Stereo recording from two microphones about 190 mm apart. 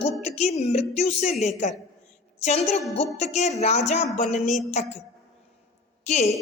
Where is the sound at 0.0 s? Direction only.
35° left (ahead or behind).